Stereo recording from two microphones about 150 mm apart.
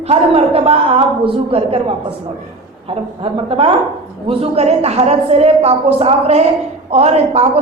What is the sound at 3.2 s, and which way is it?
A woman's voice, 35° right (ahead or behind).